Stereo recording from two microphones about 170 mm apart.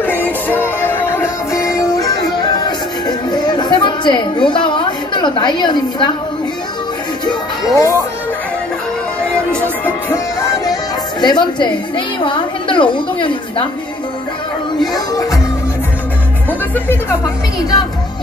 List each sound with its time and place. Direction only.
0.0 s music: 10° left (ahead or behind); by 6.1 s 25° left (ahead or behind)
7.2 s music: 20° left (ahead or behind)
9.8 s speech: 15° left (ahead or behind)
16.7 s speech: 10° left (ahead or behind)